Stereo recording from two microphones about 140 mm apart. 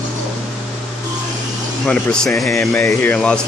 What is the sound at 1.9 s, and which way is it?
Speech, 10° left (ahead or behind).